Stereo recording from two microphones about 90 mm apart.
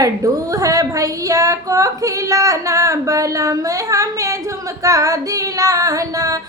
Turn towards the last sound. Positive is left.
turn(degrees=-40)  # may be behind; listen again after turning